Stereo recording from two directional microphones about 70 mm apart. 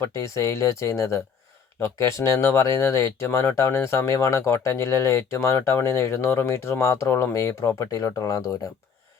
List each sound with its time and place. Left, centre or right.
0.1 s speech: left
7.9 s speech: left